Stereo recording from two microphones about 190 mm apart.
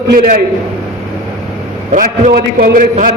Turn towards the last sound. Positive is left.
turn(degrees=-50)  # may be behind; listen again after turning